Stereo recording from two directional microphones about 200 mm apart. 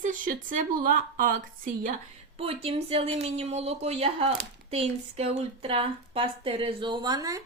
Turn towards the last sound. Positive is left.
turn(degrees=-15)  # may be behind; listen again after turning